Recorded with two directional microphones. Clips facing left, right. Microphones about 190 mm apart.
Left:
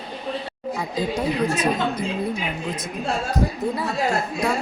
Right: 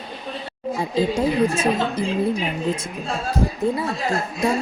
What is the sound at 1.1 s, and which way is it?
Speech, 30° right (ahead or behind).